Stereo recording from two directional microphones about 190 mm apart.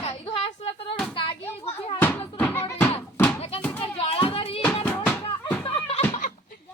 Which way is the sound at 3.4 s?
35° left (ahead or behind).